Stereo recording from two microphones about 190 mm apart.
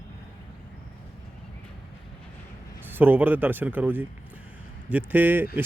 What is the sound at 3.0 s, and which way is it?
A man's voice, 10° right (ahead or behind).